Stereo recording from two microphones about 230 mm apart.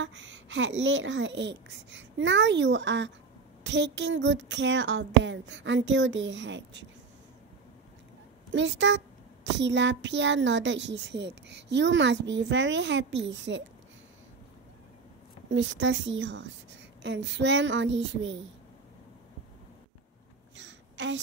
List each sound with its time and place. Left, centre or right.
0.0 s a child's voice: right
8.5 s a child's voice: right
15.5 s a child's voice: right
20.5 s a sound: right